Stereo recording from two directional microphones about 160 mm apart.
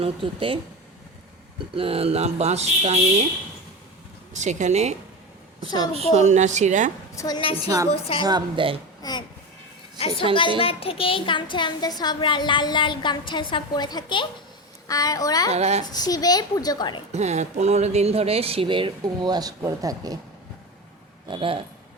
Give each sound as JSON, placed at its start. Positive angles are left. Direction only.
{"t": 0.0, "sound": "speech", "side_deg": -35}
{"t": 1.7, "sound": "speech", "side_deg": -35}
{"t": 4.4, "sound": "a woman's voice", "side_deg": -50}
{"t": 7.2, "sound": "speech", "side_deg": 25}
{"t": 8.2, "sound": "a woman's voice", "side_deg": -25}
{"t": 9.0, "sound": "babbling", "side_deg": 25}
{"t": 10.6, "sound": "a woman's voice", "side_deg": 35}
{"t": 15.4, "sound": "a woman's voice", "side_deg": -40}
{"t": 15.9, "sound": "a woman's voice", "side_deg": 25}
{"t": 17.1, "sound": "speech", "side_deg": -45}
{"t": 21.2, "sound": "speech", "side_deg": -35}